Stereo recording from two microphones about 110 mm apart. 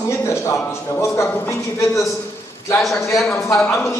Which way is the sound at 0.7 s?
25° left (ahead or behind).